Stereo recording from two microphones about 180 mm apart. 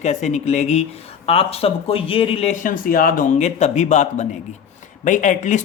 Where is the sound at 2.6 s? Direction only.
50° left (ahead or behind).